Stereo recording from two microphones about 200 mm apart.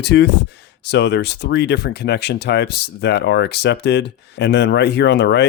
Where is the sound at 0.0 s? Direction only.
55° left (ahead or behind).